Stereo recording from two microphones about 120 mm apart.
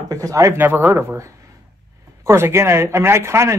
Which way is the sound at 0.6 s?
15° right (ahead or behind).